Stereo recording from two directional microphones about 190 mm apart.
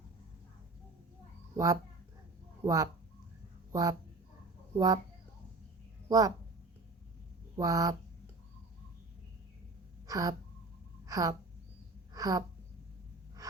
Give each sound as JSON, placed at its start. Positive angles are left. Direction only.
{"t": 1.5, "sound": "speech", "side_deg": -15}
{"t": 6.1, "sound": "a woman's voice", "side_deg": -20}
{"t": 7.5, "sound": "speech", "side_deg": -20}
{"t": 10.1, "sound": "a sound", "side_deg": -20}
{"t": 13.4, "sound": "gasp", "side_deg": -15}